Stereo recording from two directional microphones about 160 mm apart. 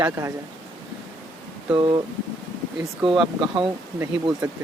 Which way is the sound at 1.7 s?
30° right (ahead or behind).